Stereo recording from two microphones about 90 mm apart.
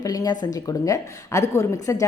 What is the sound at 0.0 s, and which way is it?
A woman's voice, 45° left (ahead or behind).